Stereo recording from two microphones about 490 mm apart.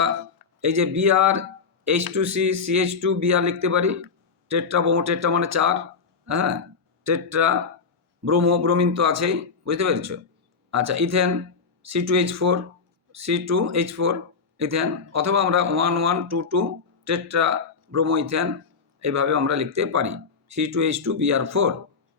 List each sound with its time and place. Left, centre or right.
0.6 s speech: right